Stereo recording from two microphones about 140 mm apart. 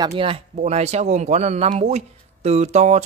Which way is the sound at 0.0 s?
40° right (ahead or behind).